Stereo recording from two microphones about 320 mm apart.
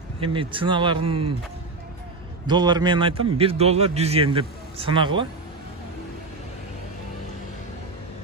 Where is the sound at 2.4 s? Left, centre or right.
Centre.